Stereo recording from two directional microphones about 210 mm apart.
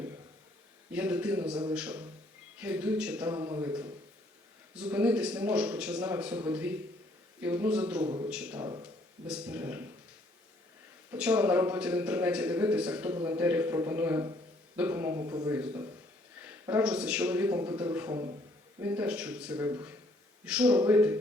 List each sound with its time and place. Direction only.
0.9 s a man's voice: 5° right (ahead or behind)
3.3 s speech: 20° right (ahead or behind)
4.7 s a man's voice: 5° right (ahead or behind)
8.0 s speech: 20° right (ahead or behind)
8.3 s a man's voice: 5° right (ahead or behind)
8.6 s speech: 20° right (ahead or behind)
9.2 s speech: 5° right (ahead or behind)
11.1 s speech: 5° right (ahead or behind)